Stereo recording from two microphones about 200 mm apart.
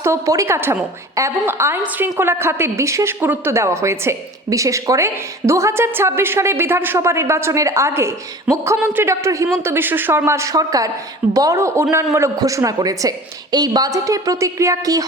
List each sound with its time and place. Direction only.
0.0 s a woman's voice: 15° right (ahead or behind)